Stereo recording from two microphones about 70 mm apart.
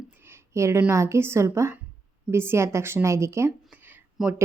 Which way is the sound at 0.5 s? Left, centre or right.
Right.